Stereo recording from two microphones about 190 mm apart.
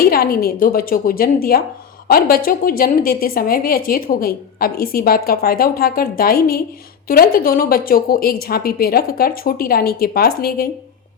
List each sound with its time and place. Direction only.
0.0 s a woman's voice: 50° left (ahead or behind)